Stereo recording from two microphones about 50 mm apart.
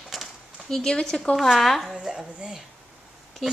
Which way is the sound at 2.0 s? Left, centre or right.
Centre.